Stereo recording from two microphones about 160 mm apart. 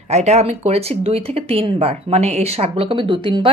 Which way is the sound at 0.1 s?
45° right (ahead or behind).